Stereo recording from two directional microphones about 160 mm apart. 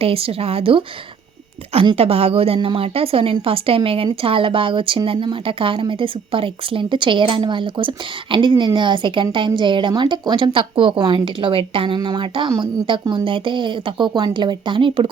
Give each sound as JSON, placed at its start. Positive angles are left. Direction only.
{"t": 0.0, "sound": "a woman's voice", "side_deg": -35}